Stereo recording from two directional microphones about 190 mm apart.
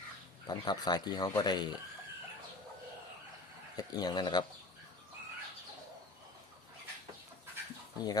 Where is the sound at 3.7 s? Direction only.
20° left (ahead or behind).